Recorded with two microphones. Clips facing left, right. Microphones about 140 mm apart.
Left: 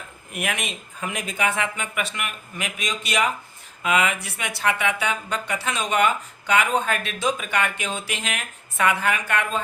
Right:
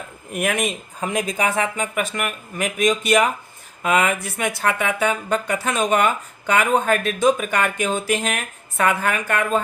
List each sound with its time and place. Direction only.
0.3 s speech: 45° right (ahead or behind)